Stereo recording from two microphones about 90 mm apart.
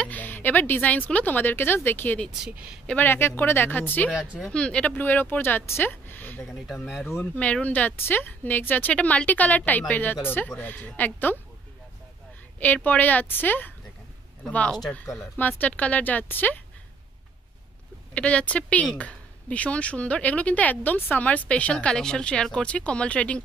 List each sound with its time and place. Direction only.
0.0 s a woman's voice: 20° left (ahead or behind)
2.4 s speech: 10° right (ahead or behind)
3.0 s speech: 25° left (ahead or behind)
12.5 s speech: 20° left (ahead or behind)
18.1 s speech: 15° left (ahead or behind)